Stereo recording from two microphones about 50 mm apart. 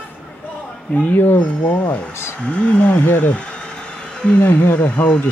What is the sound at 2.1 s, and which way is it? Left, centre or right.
Speech, left.